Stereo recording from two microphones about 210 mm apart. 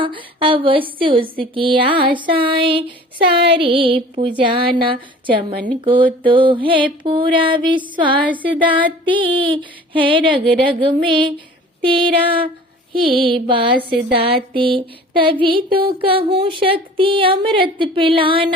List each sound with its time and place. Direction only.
0.0 s a woman's voice: 25° right (ahead or behind)
13.6 s a woman's voice: 45° right (ahead or behind)
14.1 s a woman's voice: 25° right (ahead or behind)